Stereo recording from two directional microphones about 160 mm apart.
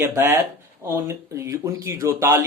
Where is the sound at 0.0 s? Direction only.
15° right (ahead or behind).